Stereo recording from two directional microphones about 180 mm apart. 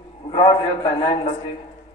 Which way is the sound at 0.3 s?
30° left (ahead or behind).